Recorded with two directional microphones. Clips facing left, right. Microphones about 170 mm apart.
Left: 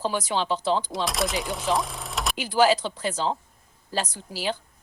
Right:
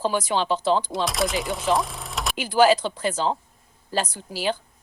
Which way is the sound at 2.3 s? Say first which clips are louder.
Right 3 dB; 55° right (ahead or behind).